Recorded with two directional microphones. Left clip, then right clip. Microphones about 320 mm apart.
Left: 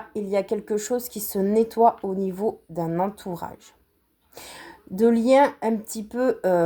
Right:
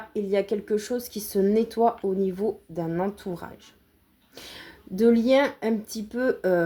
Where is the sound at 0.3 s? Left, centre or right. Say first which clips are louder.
Left 1 dB; left.